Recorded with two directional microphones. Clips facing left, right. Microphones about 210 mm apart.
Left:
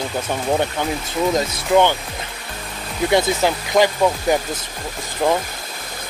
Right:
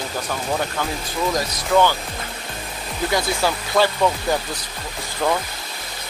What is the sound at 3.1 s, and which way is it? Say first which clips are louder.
Speech: left 5 dB; 20° left (ahead or behind).